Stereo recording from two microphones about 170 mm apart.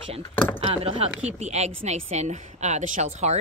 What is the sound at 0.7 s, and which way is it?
A woman's voice, 35° right (ahead or behind).